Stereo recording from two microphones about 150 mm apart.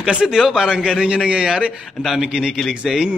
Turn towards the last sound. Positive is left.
turn(degrees=-5)  # may be behind; listen again after turning